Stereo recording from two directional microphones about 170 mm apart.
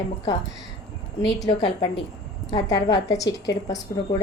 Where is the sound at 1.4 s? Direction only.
25° left (ahead or behind).